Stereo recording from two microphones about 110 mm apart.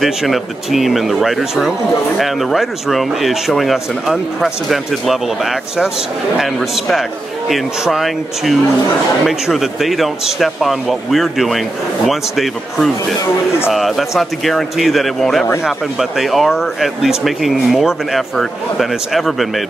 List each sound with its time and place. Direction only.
0.0 s speech: centre (ahead or behind)